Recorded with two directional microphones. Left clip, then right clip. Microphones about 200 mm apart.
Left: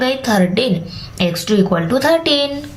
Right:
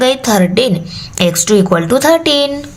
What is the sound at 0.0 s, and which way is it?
A woman's voice, 40° right (ahead or behind).